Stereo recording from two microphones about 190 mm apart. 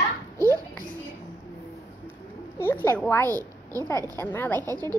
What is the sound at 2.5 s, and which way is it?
Speech, 10° left (ahead or behind).